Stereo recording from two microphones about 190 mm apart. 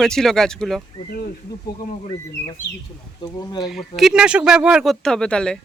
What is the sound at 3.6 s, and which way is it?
Speech, centre (ahead or behind).